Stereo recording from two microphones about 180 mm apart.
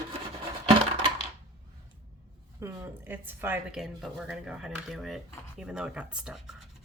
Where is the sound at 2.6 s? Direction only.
15° right (ahead or behind).